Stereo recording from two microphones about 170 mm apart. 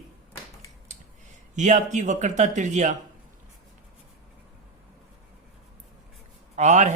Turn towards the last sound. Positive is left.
turn(degrees=-45)  # may be behind; listen again after turning